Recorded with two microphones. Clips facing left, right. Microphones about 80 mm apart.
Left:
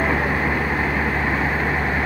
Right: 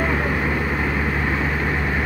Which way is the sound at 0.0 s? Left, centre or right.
Centre.